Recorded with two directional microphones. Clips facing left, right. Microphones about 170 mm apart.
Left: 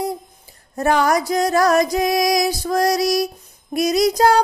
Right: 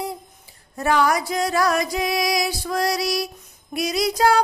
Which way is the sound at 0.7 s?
45° left (ahead or behind).